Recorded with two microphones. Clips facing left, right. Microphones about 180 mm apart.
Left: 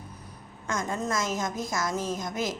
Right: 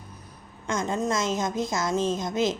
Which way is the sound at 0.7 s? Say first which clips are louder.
Right 3 dB; 20° right (ahead or behind).